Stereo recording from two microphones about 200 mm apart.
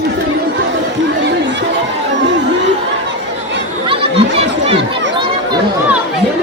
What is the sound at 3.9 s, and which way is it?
Chatter, 30° right (ahead or behind).